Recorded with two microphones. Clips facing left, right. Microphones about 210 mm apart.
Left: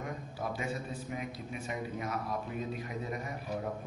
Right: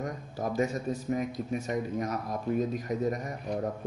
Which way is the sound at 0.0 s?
40° right (ahead or behind).